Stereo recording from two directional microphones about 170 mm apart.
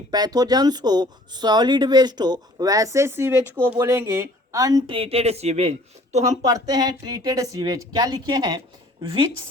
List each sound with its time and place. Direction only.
0.1 s speech: 25° right (ahead or behind); by 6.2 s 40° right (ahead or behind)
6.4 s speech: 20° right (ahead or behind)